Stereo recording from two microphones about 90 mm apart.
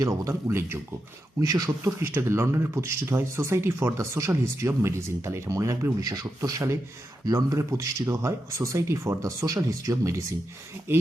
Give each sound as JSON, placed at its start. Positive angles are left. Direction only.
{"t": 0.0, "sound": "speech", "side_deg": -35}
{"t": 1.4, "sound": "speech", "side_deg": -45}
{"t": 1.8, "sound": "speech", "side_deg": -30}